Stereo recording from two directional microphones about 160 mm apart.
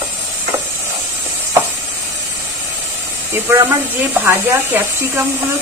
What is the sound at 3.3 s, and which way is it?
Speech, 15° right (ahead or behind).